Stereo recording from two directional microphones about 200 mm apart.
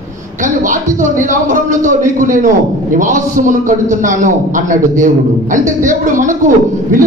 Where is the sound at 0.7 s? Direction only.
40° right (ahead or behind).